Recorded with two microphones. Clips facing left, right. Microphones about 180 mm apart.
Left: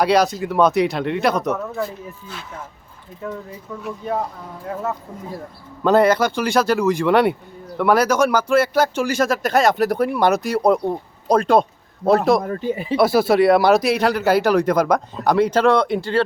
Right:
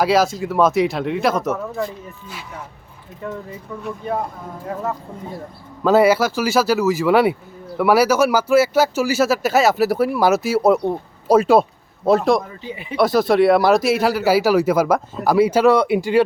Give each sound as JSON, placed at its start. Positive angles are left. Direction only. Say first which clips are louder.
{"t": 0.0, "sound": "speech", "louder": "even", "side_deg": 0}
{"t": 3.8, "sound": "speech", "louder": "even", "side_deg": 0}
{"t": 12.4, "sound": "speech", "louder": "left 7 dB", "side_deg": 50}
{"t": 13.0, "sound": "speech", "louder": "right 1 dB", "side_deg": 5}